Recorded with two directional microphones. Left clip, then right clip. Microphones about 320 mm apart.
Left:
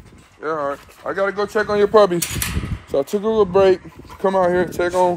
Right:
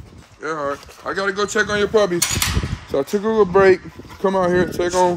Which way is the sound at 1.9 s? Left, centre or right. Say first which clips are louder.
Left 5 dB; left.